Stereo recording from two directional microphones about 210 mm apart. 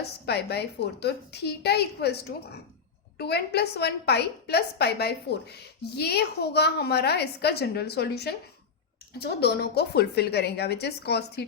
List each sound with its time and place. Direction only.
0.0 s a woman's voice: 50° left (ahead or behind)